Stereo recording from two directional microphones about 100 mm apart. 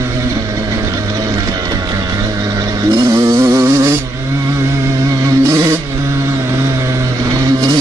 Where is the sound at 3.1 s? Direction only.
35° right (ahead or behind).